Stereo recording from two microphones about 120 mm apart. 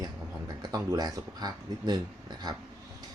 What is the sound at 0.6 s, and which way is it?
Speech, 30° right (ahead or behind).